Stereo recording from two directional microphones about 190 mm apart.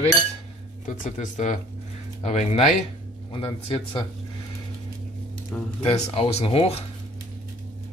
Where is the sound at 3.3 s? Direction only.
25° left (ahead or behind).